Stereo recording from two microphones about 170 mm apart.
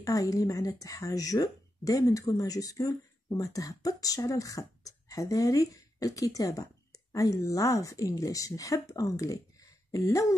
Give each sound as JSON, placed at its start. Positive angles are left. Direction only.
{"t": 0.0, "sound": "speech", "side_deg": 20}